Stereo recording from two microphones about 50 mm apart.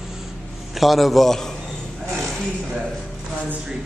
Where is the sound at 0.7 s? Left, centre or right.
Centre.